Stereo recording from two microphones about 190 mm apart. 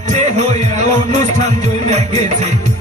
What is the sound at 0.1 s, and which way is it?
Music, 40° right (ahead or behind).